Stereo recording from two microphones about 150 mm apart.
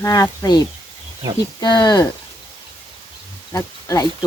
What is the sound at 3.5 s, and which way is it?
Speech, 20° left (ahead or behind).